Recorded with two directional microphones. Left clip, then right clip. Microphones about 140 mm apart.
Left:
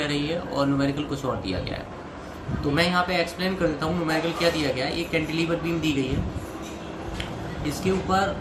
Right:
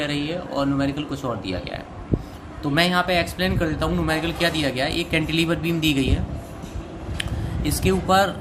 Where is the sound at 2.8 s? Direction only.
90° right.